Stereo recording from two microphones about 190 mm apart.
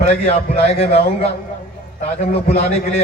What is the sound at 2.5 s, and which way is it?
Speech, 35° left (ahead or behind).